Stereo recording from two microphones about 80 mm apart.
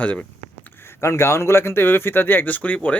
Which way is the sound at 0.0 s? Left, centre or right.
Centre.